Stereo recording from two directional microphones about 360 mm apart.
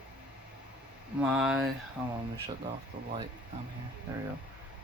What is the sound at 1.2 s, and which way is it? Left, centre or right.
Speech, centre.